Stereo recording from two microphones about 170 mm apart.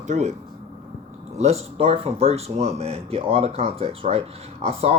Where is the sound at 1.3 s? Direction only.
40° right (ahead or behind).